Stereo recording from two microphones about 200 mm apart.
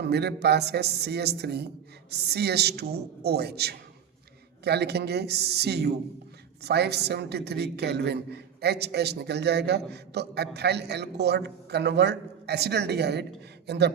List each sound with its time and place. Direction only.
0.0 s a man's voice: 55° right (ahead or behind)